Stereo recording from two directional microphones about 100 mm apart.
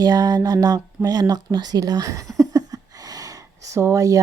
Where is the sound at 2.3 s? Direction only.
35° right (ahead or behind).